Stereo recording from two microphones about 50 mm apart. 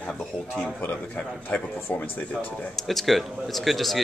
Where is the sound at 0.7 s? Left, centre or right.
Left.